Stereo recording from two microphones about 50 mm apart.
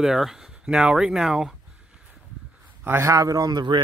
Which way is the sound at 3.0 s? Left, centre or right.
Right.